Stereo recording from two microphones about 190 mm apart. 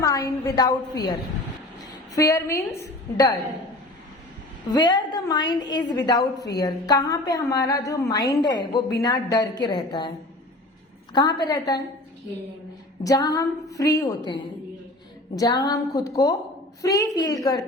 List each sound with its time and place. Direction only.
0.0 s a woman's voice: 20° left (ahead or behind)
2.1 s a woman's voice: 15° left (ahead or behind)
4.7 s a woman's voice: 25° left (ahead or behind)
11.1 s a woman's voice: 20° left (ahead or behind)
13.0 s a woman's voice: 20° left (ahead or behind)